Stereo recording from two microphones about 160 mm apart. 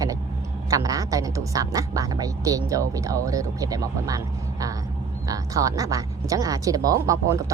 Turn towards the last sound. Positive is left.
turn(degrees=-20)  # may be behind; listen again after turning